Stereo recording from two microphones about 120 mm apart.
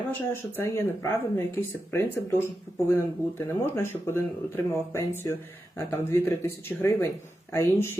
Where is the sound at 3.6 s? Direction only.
20° left (ahead or behind).